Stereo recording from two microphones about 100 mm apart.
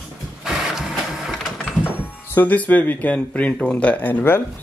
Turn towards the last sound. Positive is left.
turn(degrees=20)  # may be behind; listen again after turning